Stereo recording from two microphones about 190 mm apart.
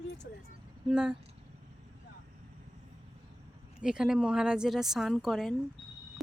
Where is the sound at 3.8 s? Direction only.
5° right (ahead or behind).